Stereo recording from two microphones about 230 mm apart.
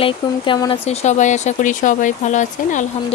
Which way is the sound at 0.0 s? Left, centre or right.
Left.